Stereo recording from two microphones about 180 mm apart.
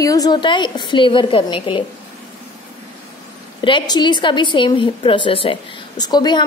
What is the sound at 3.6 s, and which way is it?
A woman's voice, 25° left (ahead or behind).